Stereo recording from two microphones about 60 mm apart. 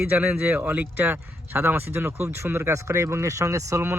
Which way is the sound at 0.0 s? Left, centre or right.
Right.